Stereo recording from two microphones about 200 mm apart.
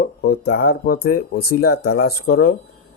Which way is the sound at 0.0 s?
50° left (ahead or behind).